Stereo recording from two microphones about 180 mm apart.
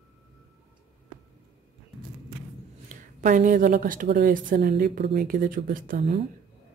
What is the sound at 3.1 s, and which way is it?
A woman's voice, 45° right (ahead or behind).